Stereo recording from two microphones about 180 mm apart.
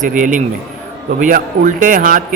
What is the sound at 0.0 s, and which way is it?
A man's voice, 45° right (ahead or behind).